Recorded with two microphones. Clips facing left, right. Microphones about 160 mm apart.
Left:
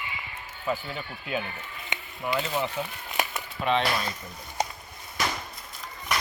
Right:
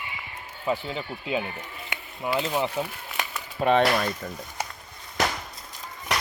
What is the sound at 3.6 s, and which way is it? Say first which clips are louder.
Speech: right 5 dB; 40° right (ahead or behind).